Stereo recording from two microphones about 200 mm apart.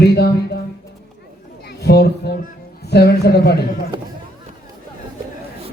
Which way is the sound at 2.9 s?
55° left (ahead or behind).